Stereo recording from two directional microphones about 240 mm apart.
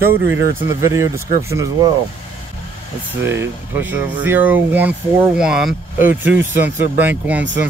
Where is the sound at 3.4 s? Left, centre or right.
Centre.